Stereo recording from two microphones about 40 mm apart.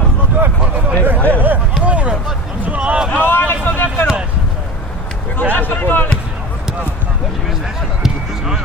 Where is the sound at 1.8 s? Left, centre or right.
Right.